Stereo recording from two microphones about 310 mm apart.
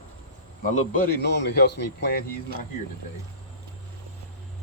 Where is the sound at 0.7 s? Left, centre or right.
Left.